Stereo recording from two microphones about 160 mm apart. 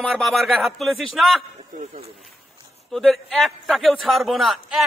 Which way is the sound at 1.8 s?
40° right (ahead or behind).